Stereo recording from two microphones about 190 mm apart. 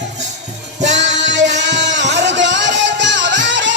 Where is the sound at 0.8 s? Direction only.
70° right (ahead or behind).